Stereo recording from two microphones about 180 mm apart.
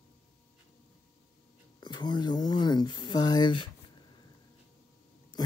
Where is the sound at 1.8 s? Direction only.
25° left (ahead or behind).